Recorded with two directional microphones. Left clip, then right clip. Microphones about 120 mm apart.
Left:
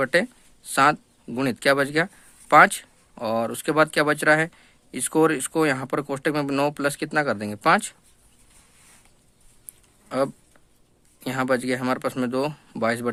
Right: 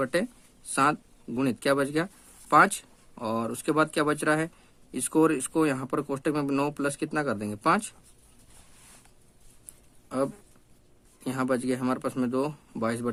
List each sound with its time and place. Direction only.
0.0 s speech: 30° left (ahead or behind)
10.1 s speech: 30° left (ahead or behind)